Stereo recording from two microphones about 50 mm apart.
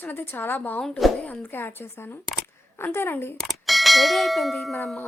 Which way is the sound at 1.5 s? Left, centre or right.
Left.